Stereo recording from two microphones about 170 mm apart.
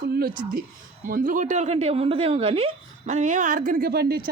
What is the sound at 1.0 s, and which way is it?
Speech, 50° right (ahead or behind).